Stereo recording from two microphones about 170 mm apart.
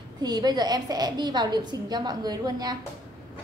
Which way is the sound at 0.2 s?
25° right (ahead or behind).